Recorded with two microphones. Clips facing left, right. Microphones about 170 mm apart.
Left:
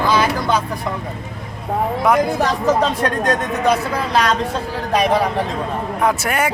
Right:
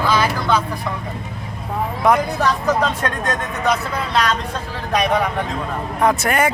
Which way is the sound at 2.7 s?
35° left (ahead or behind).